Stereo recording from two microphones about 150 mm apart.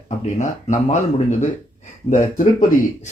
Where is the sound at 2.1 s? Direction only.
60° left (ahead or behind).